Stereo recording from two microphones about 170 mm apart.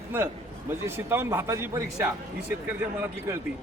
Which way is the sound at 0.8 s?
15° right (ahead or behind).